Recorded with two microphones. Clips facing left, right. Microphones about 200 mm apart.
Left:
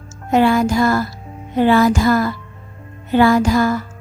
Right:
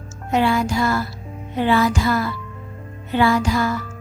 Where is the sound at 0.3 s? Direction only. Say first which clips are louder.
Left 5 dB; 50° left (ahead or behind).